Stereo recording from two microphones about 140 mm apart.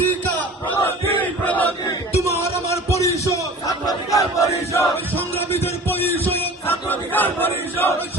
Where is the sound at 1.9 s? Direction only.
20° left (ahead or behind).